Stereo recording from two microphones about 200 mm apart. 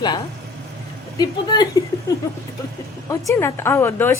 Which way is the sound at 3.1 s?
15° left (ahead or behind).